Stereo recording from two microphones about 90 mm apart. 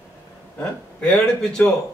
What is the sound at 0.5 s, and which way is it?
Speech, 15° left (ahead or behind).